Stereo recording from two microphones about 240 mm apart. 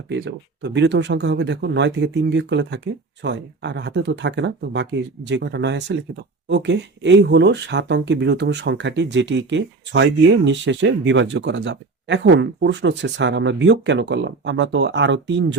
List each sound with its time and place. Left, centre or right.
0.1 s speech: right